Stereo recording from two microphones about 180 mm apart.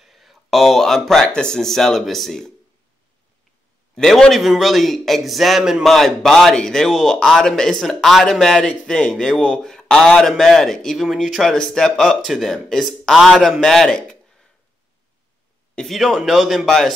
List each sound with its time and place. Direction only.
0.0 s speech: centre (ahead or behind)
3.9 s a man's voice: 5° left (ahead or behind)
15.7 s a man's voice: centre (ahead or behind)